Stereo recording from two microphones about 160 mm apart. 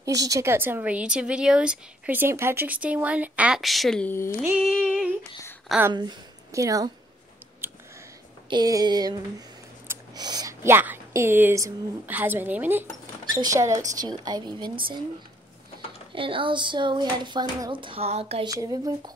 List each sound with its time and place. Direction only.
0.0 s speech: 20° right (ahead or behind); by 4.1 s centre (ahead or behind)
4.1 s speech: 15° left (ahead or behind)
4.4 s a sound: 5° right (ahead or behind)
5.9 s a woman's voice: 25° right (ahead or behind)
8.5 s a woman's voice: 25° right (ahead or behind)
13.3 s a woman's voice: 20° right (ahead or behind)
16.2 s a child's voice: 35° right (ahead or behind)
18.5 s a woman's voice: 20° right (ahead or behind)